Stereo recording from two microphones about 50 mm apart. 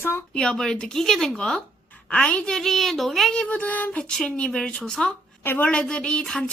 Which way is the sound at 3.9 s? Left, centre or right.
Centre.